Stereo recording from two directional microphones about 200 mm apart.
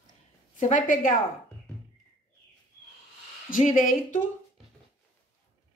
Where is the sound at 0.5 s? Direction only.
40° left (ahead or behind).